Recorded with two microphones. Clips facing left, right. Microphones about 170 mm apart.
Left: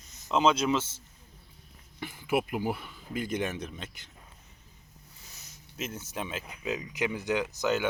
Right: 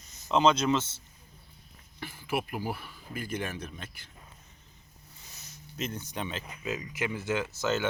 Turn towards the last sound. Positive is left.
turn(degrees=15)  # may be behind; listen again after turning